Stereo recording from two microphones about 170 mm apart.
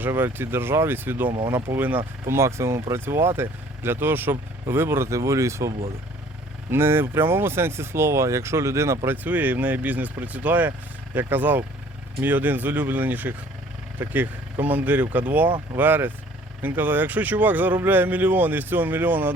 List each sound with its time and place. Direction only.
0.0 s speech: 10° right (ahead or behind)